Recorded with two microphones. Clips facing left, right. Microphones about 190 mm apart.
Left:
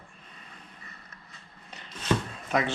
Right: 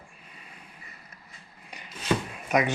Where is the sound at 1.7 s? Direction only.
10° right (ahead or behind).